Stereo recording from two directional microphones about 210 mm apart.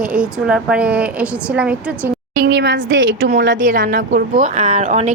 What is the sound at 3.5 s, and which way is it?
Speech, 40° right (ahead or behind).